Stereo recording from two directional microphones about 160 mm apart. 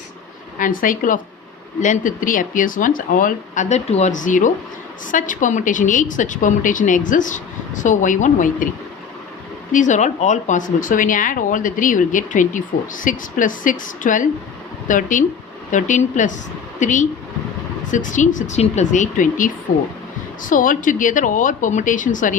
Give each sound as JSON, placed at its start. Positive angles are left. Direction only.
{"t": 0.6, "sound": "a woman's voice", "side_deg": 60}
{"t": 9.7, "sound": "a woman's voice", "side_deg": 50}